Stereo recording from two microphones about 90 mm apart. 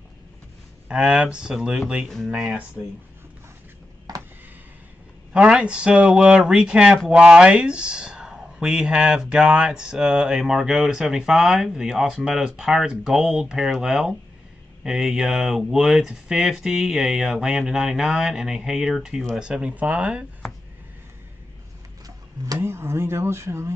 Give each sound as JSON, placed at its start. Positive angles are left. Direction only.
{"t": 0.8, "sound": "speech", "side_deg": -10}
{"t": 4.1, "sound": "a sound", "side_deg": -45}
{"t": 5.3, "sound": "speech", "side_deg": -10}
{"t": 22.6, "sound": "speech", "side_deg": -30}